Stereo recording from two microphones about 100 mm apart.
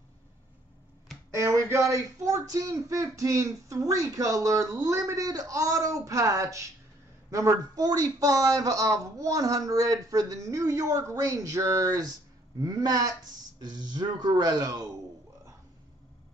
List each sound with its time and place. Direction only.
1.4 s speech: 30° right (ahead or behind)